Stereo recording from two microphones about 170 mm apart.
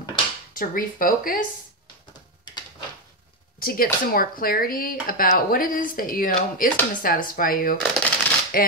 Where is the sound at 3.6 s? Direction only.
60° left (ahead or behind).